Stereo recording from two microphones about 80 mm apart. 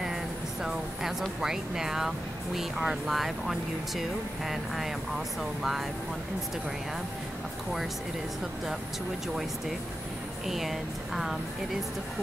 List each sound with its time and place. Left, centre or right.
0.0 s a sound: centre
1.4 s speech: centre
10.4 s speech: centre